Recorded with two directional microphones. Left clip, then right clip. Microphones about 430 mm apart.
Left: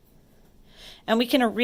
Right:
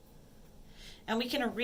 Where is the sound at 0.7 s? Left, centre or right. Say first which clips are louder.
Left 11 dB; centre.